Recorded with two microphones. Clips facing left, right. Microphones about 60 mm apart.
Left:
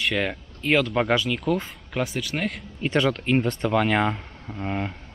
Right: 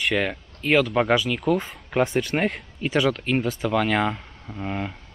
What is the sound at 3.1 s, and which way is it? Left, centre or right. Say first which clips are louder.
Speech: left 1 dB; centre.